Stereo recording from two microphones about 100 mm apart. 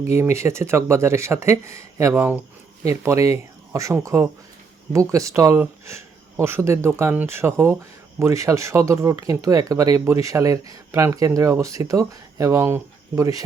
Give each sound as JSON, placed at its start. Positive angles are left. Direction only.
{"t": 0.2, "sound": "speech", "side_deg": -25}
{"t": 2.1, "sound": "speech", "side_deg": -15}
{"t": 2.8, "sound": "speech", "side_deg": -30}